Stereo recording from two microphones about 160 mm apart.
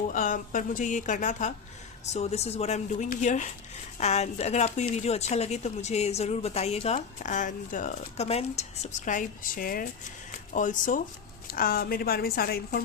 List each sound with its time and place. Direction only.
0.1 s a woman's voice: 55° left (ahead or behind)
11.4 s a woman's voice: 65° left (ahead or behind)